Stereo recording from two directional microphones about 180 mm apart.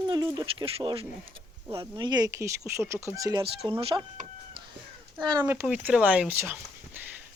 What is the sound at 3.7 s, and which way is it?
Speech, 30° right (ahead or behind).